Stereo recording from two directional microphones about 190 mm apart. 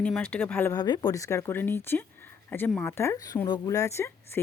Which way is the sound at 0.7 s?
20° left (ahead or behind).